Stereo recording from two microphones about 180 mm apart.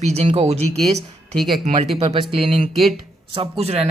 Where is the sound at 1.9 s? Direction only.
30° right (ahead or behind).